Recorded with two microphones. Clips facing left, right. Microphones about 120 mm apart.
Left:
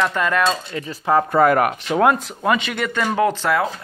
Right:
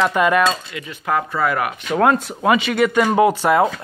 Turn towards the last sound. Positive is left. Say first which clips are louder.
# right 4 dB
turn(degrees=-15)  # may be behind; listen again after turning